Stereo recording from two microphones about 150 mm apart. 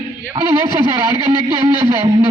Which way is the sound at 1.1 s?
30° right (ahead or behind).